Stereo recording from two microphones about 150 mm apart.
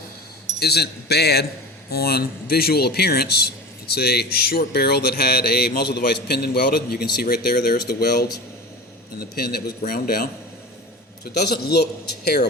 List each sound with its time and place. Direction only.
0.6 s speech: 90° left
9.3 s speech: 90° left
11.3 s speech: 90° left